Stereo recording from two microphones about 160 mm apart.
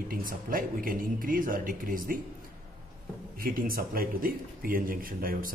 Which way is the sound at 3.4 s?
60° right (ahead or behind).